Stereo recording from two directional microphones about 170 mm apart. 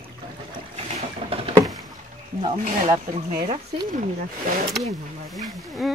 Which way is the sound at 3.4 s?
35° right (ahead or behind).